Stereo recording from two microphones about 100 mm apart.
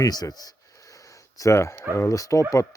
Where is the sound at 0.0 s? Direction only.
40° left (ahead or behind).